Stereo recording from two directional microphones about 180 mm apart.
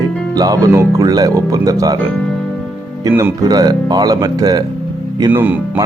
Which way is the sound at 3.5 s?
20° right (ahead or behind).